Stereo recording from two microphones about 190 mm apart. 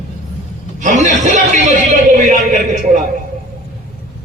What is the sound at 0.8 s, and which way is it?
Speech, 40° right (ahead or behind).